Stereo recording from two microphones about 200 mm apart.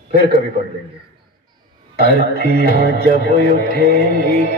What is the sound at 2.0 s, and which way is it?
Speech, 50° right (ahead or behind).